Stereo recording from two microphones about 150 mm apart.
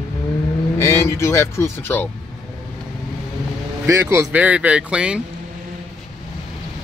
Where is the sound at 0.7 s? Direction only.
15° left (ahead or behind).